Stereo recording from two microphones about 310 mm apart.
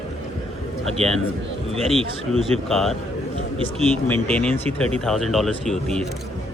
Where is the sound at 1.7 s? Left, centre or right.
Centre.